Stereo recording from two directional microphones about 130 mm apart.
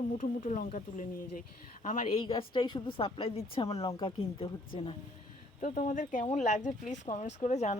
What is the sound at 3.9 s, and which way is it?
Speech, 30° left (ahead or behind).